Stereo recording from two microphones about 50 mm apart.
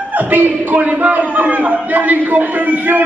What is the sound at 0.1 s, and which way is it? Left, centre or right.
A man's voice, right.